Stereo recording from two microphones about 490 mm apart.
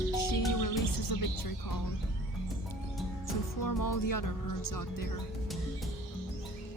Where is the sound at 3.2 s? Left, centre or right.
Left.